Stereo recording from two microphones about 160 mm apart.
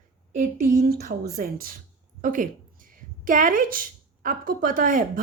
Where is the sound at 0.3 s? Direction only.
60° right (ahead or behind).